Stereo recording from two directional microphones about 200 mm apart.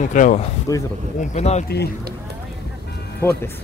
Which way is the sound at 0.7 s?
15° left (ahead or behind).